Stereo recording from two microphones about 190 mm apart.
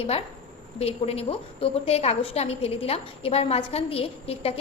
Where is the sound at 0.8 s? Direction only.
30° left (ahead or behind).